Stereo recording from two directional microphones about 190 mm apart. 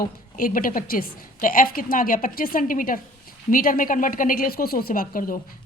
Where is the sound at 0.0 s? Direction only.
45° left (ahead or behind).